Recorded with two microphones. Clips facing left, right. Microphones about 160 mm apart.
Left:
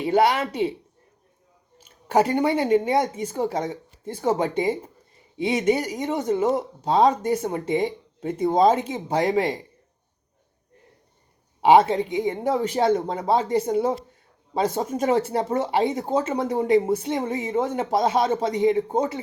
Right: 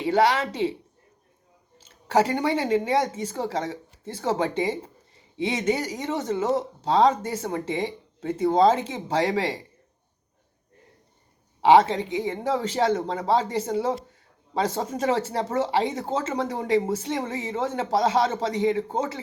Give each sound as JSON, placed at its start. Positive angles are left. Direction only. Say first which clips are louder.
{"t": 0.0, "sound": "speech", "louder": "left 1 dB", "side_deg": 10}
{"t": 2.3, "sound": "speech", "louder": "left 3 dB", "side_deg": 20}
{"t": 12.1, "sound": "speech", "louder": "even", "side_deg": 15}